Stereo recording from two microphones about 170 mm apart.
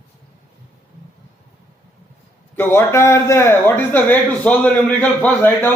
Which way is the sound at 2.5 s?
15° left (ahead or behind).